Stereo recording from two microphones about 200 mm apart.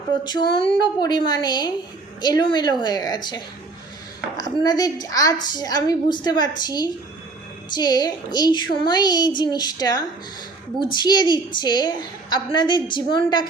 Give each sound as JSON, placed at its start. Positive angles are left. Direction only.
{"t": 0.3, "sound": "a woman's voice", "side_deg": 25}